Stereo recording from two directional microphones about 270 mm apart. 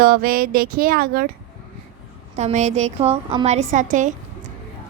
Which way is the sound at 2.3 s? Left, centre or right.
Right.